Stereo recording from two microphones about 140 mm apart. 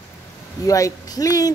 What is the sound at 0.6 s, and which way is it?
Speech, 25° left (ahead or behind).